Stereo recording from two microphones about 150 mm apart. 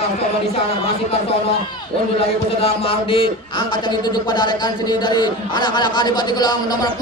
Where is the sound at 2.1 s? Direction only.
40° left (ahead or behind).